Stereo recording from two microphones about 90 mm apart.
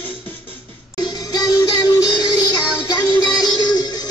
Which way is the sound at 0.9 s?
50° left (ahead or behind).